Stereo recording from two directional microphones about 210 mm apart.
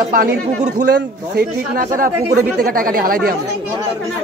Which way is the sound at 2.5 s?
45° right (ahead or behind).